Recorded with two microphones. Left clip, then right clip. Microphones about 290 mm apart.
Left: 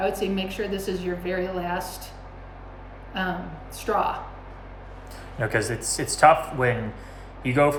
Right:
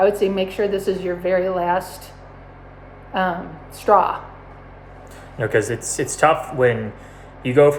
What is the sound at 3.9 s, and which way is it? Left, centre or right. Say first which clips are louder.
Speech: right 9 dB; centre.